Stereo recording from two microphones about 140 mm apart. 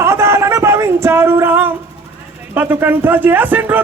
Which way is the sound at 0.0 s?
20° right (ahead or behind).